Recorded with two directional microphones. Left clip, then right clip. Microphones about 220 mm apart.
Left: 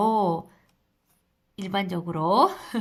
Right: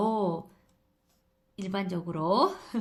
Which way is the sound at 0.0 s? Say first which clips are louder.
Left 6 dB; 20° left (ahead or behind).